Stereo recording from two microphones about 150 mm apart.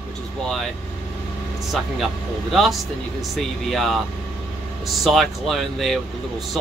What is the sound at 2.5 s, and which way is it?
A man's voice, centre (ahead or behind).